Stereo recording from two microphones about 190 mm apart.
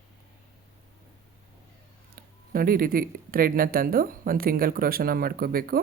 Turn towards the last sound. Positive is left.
turn(degrees=-50)  # may be behind; listen again after turning